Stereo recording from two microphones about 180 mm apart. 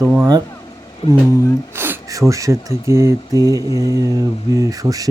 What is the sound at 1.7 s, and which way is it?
Speech, 10° right (ahead or behind).